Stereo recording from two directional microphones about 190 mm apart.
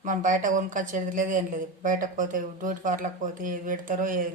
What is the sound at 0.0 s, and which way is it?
Speech, 45° right (ahead or behind).